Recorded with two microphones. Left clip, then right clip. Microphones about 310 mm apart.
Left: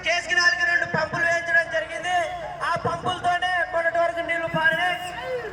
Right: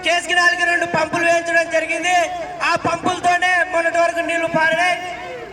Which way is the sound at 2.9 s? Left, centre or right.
Right.